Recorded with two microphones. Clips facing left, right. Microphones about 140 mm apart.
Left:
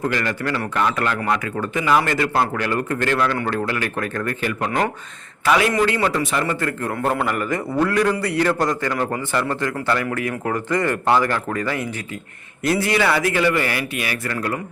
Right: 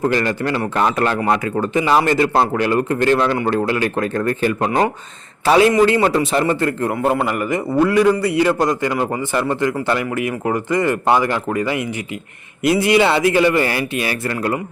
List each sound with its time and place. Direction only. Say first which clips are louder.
0.0 s speech: right 5 dB; 30° right (ahead or behind)
7.1 s a man's voice: right 3 dB; 10° right (ahead or behind); by 14.6 s 25° right (ahead or behind)